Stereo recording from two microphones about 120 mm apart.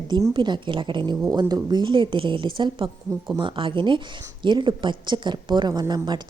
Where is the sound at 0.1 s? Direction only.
40° right (ahead or behind).